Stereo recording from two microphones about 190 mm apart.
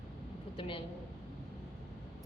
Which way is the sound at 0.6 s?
25° left (ahead or behind).